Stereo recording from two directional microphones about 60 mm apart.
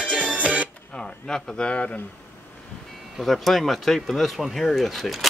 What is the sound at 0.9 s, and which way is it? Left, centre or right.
A man's voice, centre.